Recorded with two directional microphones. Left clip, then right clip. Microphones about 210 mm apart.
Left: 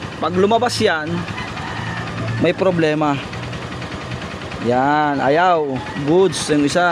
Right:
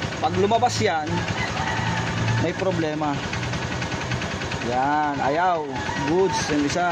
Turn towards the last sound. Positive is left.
turn(degrees=55)  # may be behind; listen again after turning